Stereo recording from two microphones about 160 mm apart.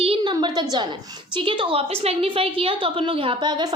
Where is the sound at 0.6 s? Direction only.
25° right (ahead or behind).